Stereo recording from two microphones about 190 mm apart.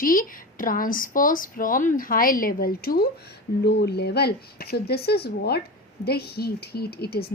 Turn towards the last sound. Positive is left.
turn(degrees=55)  # may be behind; listen again after turning